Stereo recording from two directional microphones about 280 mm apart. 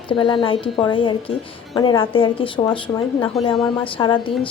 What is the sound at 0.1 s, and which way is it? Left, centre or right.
A woman's voice, centre.